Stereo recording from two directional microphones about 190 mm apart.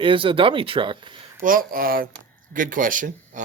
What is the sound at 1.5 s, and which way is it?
Speech, 50° right (ahead or behind).